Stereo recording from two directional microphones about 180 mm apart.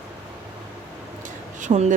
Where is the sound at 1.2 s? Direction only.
45° right (ahead or behind).